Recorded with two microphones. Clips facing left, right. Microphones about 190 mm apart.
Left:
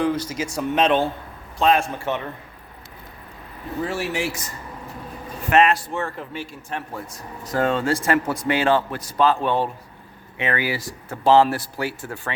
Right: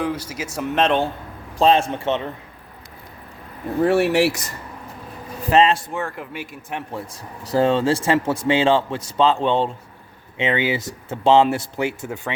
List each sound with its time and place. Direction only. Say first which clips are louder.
0.0 s speech: left 3 dB; 5° right (ahead or behind)
1.5 s speech: right 3 dB; 30° right (ahead or behind)
3.8 s speech: right 9 dB; 60° right (ahead or behind)
5.5 s speech: right 1 dB; 30° right (ahead or behind)
5.9 s speech: even; 15° right (ahead or behind)
7.4 s speech: right 4 dB; 30° right (ahead or behind)